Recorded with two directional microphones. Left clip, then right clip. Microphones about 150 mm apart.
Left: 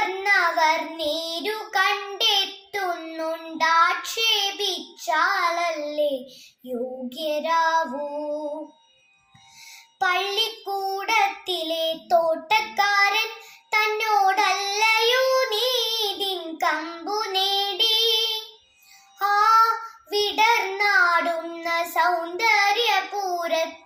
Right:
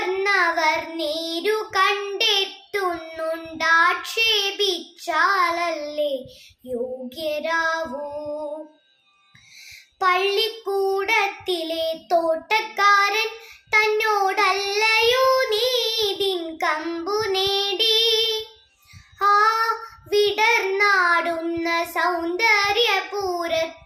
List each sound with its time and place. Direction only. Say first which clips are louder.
0.2 s child singing: even; 30° right (ahead or behind)
10.0 s child singing: right 3 dB; 25° right (ahead or behind)